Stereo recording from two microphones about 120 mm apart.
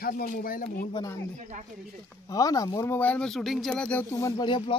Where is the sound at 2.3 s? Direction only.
30° left (ahead or behind).